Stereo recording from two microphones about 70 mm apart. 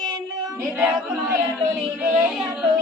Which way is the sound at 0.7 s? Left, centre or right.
Centre.